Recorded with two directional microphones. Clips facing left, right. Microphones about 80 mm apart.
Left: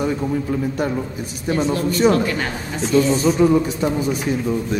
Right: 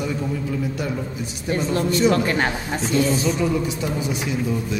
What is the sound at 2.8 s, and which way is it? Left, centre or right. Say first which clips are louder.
Speech: left 5 dB; centre.